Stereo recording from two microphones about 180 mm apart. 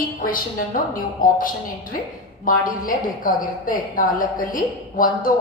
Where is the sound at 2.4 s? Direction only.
50° left (ahead or behind).